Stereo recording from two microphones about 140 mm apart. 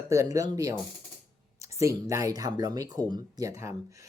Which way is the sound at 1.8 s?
20° right (ahead or behind).